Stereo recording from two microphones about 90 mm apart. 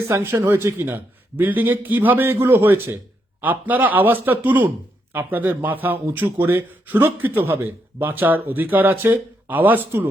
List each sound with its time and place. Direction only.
0.1 s speech: 25° right (ahead or behind)